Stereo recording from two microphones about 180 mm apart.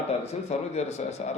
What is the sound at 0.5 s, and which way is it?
Speech, 35° left (ahead or behind).